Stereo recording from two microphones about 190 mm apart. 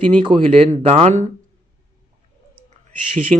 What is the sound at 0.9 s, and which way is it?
Speech, 30° right (ahead or behind).